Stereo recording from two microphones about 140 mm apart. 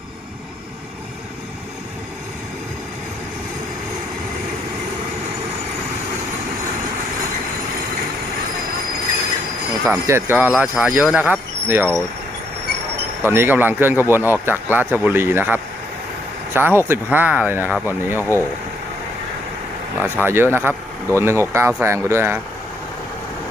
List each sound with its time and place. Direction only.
10.1 s speech: 15° right (ahead or behind)
13.2 s speech: 15° right (ahead or behind)
20.0 s speech: 15° right (ahead or behind)